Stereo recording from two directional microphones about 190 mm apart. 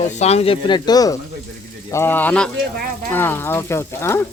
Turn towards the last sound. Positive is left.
turn(degrees=15)  # may be behind; listen again after turning